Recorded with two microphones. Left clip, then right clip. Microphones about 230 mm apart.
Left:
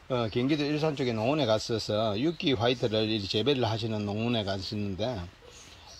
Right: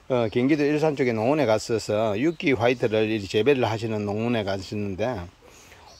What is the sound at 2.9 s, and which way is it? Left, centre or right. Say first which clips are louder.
Speech: right 5 dB; centre.